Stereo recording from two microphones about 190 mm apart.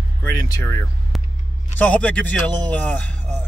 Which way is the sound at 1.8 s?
5° left (ahead or behind).